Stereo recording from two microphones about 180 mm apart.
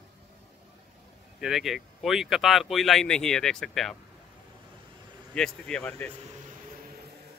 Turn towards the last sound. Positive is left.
turn(degrees=5)  # may be behind; listen again after turning